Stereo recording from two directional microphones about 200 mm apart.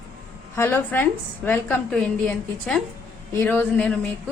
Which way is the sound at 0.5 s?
10° left (ahead or behind).